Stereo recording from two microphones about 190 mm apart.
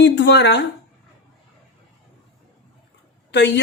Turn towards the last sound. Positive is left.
turn(degrees=65)  # may be behind; listen again after turning